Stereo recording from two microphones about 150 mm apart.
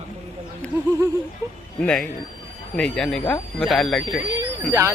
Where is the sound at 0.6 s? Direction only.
10° left (ahead or behind).